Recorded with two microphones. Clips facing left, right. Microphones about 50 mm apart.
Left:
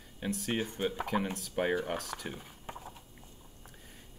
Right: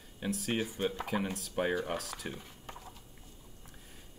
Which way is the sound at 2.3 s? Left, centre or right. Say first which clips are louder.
Left 2 dB; centre.